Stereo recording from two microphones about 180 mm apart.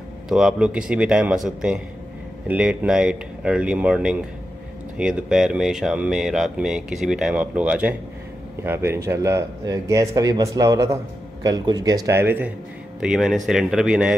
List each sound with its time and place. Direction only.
0.3 s a man's voice: 5° right (ahead or behind)